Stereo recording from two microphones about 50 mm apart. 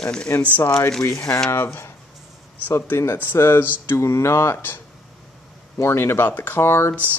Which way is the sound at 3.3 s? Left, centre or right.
Left.